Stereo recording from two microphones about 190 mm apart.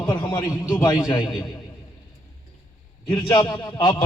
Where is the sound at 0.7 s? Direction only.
20° left (ahead or behind).